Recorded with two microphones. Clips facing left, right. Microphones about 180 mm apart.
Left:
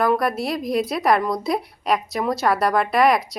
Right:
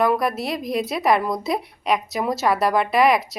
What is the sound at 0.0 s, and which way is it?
A woman's voice, centre (ahead or behind).